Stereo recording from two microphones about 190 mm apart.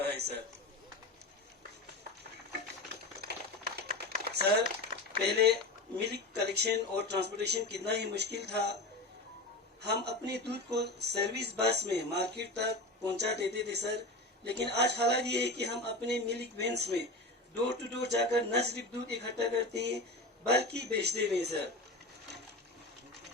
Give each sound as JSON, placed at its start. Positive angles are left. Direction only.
{"t": 0.1, "sound": "a sound", "side_deg": -60}
{"t": 3.8, "sound": "typing", "side_deg": -55}
{"t": 5.2, "sound": "speech", "side_deg": -60}
{"t": 9.8, "sound": "speech", "side_deg": -60}